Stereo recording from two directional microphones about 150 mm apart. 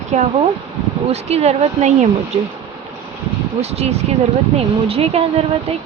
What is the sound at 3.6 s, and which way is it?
Speech, 45° right (ahead or behind).